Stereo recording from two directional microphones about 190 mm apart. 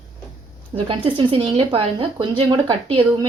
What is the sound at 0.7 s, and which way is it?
Speech, 30° right (ahead or behind).